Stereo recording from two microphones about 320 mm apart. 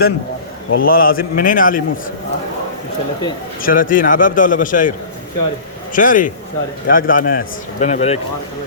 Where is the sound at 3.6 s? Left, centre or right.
Left.